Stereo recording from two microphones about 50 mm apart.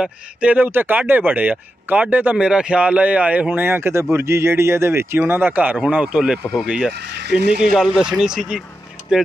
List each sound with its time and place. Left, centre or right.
0.0 s speech: right
0.7 s speech: right
2.3 s speech: centre; by 5.4 s right
5.4 s speech: right
5.9 s speech: centre
8.4 s speech: centre
9.1 s speech: centre